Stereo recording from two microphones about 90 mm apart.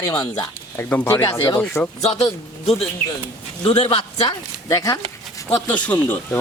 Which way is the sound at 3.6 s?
55° left (ahead or behind).